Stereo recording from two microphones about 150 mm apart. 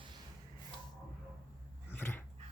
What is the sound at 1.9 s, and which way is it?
Dog, 15° left (ahead or behind).